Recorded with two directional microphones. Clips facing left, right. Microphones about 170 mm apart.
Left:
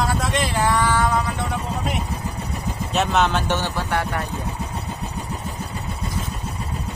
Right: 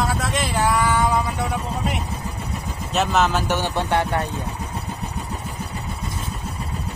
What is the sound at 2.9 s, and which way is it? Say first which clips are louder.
Speech: even; centre (ahead or behind).